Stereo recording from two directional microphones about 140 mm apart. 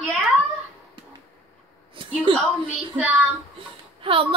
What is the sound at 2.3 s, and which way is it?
Speech, 40° right (ahead or behind).